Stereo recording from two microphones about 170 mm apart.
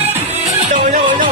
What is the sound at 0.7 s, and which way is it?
Music, 30° right (ahead or behind).